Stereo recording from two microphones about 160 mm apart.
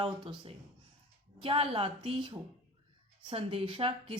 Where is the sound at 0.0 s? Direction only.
35° right (ahead or behind).